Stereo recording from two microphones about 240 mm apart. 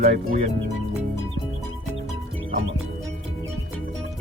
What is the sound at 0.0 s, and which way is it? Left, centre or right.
Speech, right.